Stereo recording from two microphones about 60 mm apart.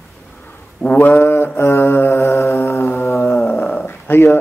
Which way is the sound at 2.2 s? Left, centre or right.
Left.